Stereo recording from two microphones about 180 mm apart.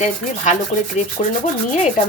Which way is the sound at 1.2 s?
40° left (ahead or behind).